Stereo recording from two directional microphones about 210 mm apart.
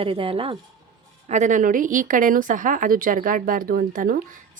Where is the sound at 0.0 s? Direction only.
25° right (ahead or behind).